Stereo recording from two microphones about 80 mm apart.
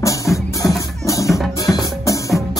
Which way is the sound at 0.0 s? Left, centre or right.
Left.